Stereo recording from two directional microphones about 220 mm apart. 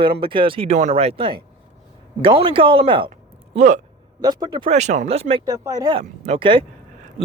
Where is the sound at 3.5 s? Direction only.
35° right (ahead or behind).